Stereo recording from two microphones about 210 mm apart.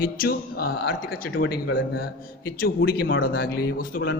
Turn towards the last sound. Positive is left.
turn(degrees=45)  # may be behind; listen again after turning